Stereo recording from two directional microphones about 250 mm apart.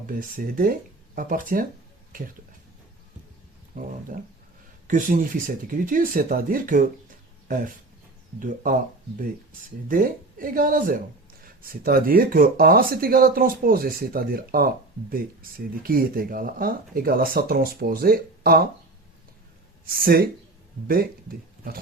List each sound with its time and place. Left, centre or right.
0.1 s speech: right
3.8 s speech: right
9.9 s speech: right
19.9 s speech: right